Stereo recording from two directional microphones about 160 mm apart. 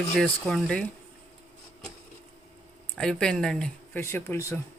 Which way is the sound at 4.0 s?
15° left (ahead or behind).